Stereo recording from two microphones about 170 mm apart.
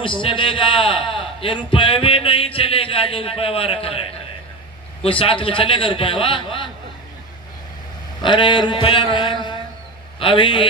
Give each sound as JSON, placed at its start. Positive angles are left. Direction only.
{"t": 0.0, "sound": "a man's voice", "side_deg": 30}
{"t": 5.2, "sound": "a man's voice", "side_deg": 30}
{"t": 8.2, "sound": "a man's voice", "side_deg": 30}